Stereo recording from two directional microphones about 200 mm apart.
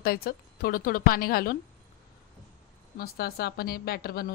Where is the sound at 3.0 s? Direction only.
50° left (ahead or behind).